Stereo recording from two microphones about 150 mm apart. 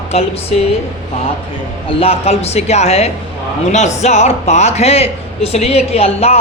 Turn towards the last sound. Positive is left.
turn(degrees=40)  # may be behind; listen again after turning